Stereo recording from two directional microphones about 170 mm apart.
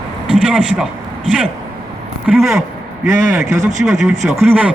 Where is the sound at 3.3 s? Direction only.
15° right (ahead or behind).